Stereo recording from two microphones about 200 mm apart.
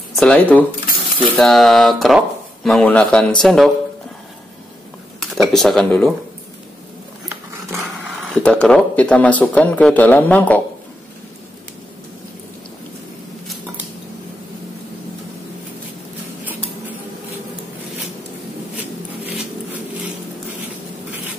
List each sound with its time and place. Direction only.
0.1 s speech: 5° left (ahead or behind)
5.2 s speech: centre (ahead or behind)
8.4 s speech: 5° left (ahead or behind)